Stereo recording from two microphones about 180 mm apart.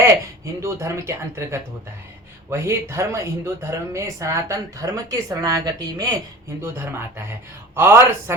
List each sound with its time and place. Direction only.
0.6 s speech: 15° right (ahead or behind)